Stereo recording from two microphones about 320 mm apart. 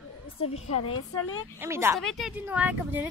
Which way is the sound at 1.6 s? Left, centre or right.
Centre.